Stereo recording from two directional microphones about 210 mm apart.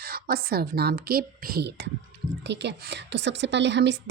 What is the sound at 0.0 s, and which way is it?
A woman's voice, 45° right (ahead or behind).